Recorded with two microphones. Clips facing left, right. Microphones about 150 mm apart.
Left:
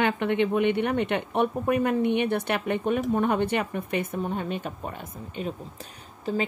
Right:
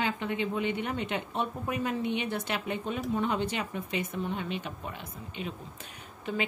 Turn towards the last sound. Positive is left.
turn(degrees=35)  # may be behind; listen again after turning